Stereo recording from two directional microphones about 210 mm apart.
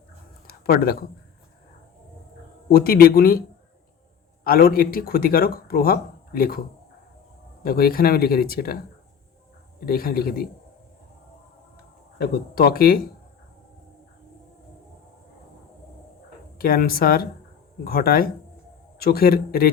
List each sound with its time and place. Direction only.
0.4 s a sound: 45° left (ahead or behind)
2.6 s speech: 45° left (ahead or behind)
4.4 s speech: 45° left (ahead or behind)
7.6 s speech: 45° left (ahead or behind)
9.8 s speech: 45° left (ahead or behind)
12.2 s speech: 45° left (ahead or behind)
16.6 s speech: 45° left (ahead or behind)